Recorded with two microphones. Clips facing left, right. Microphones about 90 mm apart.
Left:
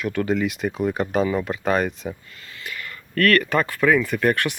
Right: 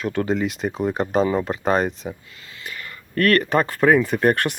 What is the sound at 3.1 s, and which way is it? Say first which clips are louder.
Speech: right 1 dB; 30° right (ahead or behind).